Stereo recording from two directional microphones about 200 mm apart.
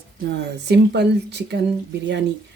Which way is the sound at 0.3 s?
55° right (ahead or behind).